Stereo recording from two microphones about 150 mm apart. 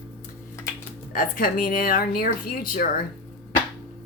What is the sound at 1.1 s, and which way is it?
A woman's voice, 65° left (ahead or behind).